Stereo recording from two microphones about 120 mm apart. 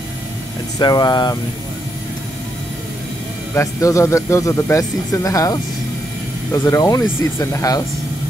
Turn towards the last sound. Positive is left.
turn(degrees=25)  # may be behind; listen again after turning